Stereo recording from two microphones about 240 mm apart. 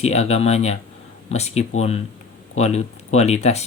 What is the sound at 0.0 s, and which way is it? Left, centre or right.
Speech, left.